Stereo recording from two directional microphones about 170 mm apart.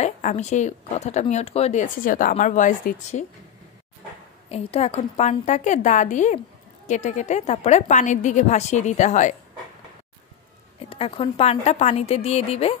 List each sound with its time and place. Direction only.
0.0 s speech: 45° left (ahead or behind)
4.5 s speech: 35° left (ahead or behind)
10.9 s a woman's voice: 30° left (ahead or behind)